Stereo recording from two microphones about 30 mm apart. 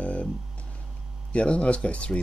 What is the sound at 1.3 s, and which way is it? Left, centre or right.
Speech, left.